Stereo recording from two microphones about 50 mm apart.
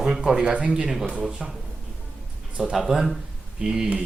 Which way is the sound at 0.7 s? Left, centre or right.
Centre.